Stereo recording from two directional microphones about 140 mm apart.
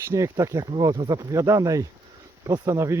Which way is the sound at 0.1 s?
20° right (ahead or behind).